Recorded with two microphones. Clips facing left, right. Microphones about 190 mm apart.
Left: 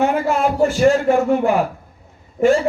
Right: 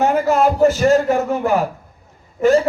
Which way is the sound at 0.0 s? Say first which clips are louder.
Right 2 dB; 40° right (ahead or behind).